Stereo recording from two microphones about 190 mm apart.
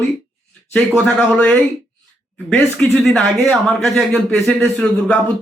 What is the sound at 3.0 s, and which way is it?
A man's voice, centre (ahead or behind).